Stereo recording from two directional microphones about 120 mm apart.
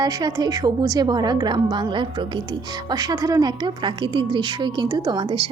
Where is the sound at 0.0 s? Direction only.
35° right (ahead or behind).